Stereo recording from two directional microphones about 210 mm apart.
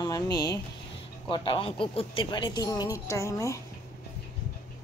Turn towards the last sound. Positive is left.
turn(degrees=15)  # may be behind; listen again after turning